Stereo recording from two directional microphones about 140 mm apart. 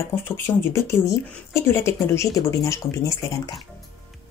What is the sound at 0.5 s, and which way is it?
Speech, 20° left (ahead or behind).